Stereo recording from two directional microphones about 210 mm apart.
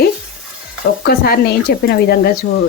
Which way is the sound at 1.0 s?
50° left (ahead or behind).